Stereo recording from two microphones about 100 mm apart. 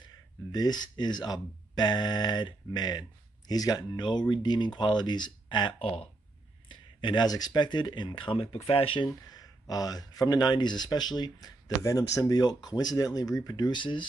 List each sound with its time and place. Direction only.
0.0 s speech: 45° left (ahead or behind)
5.8 s speech: 80° left
6.7 s speech: 50° left (ahead or behind)
9.3 s speech: 40° left (ahead or behind)